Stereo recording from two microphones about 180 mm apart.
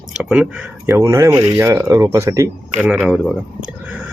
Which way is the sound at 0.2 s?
5° right (ahead or behind).